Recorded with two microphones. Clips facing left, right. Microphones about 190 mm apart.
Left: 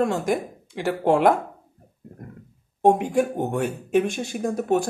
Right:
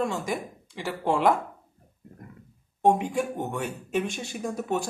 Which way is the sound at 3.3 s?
35° left (ahead or behind).